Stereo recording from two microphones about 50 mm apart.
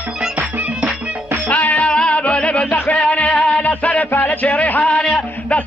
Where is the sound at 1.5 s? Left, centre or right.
Left.